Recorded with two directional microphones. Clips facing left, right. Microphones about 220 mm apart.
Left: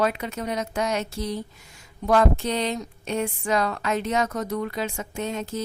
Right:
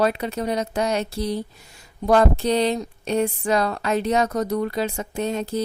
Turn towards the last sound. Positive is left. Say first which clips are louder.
# right 5 dB
turn(degrees=-35)  # may be behind; listen again after turning